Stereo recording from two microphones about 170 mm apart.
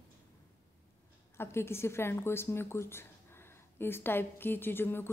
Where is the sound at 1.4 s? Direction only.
15° left (ahead or behind).